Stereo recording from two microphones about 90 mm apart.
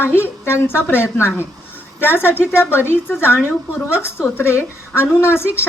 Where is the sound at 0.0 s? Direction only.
25° left (ahead or behind).